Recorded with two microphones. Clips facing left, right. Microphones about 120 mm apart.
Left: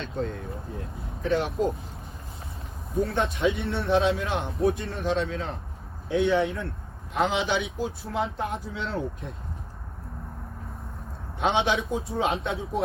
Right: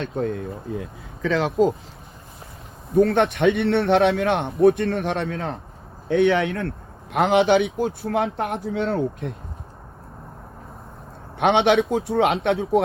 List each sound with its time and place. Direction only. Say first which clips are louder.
0.0 s a man's voice: right 6 dB; 55° right (ahead or behind)
1.2 s speech: right 6 dB; 90° right
2.9 s a man's voice: right 9 dB; 65° right (ahead or behind)
11.3 s speech: right 7 dB; 65° right (ahead or behind)